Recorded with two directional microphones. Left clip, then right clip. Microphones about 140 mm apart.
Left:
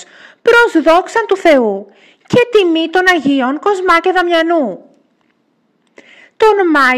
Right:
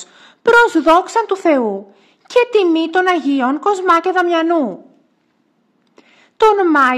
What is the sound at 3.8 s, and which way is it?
Speech, 25° left (ahead or behind).